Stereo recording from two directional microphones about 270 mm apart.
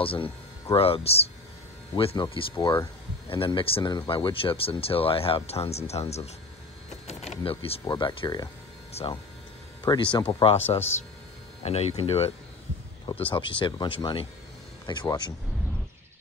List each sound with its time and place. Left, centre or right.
0.0 s speech: centre
11.6 s speech: left
13.3 s speech: centre